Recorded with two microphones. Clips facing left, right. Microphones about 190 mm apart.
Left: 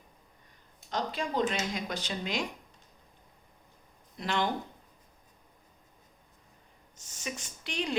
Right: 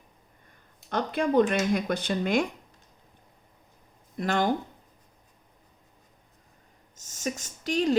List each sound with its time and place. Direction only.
0.9 s speech: 55° right (ahead or behind)
4.2 s speech: 45° right (ahead or behind)
6.9 s speech: 45° right (ahead or behind)